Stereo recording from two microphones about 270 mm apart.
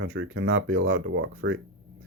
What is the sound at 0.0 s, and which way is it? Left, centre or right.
Speech, right.